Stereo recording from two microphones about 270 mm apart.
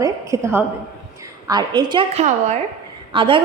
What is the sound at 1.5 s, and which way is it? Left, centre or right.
A woman's voice, centre.